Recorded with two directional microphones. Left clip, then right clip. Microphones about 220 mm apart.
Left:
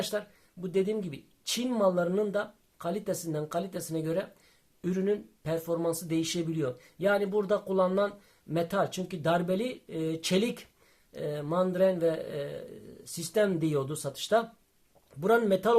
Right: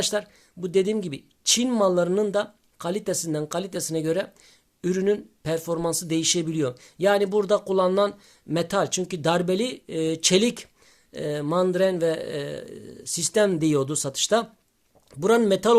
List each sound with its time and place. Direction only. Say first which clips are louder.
0.0 s speech: right 7 dB; 45° right (ahead or behind)